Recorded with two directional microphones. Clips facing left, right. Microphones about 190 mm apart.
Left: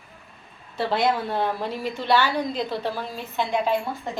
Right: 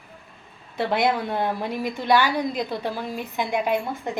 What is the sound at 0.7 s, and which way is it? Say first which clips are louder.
A woman's voice: right 1 dB; 15° right (ahead or behind).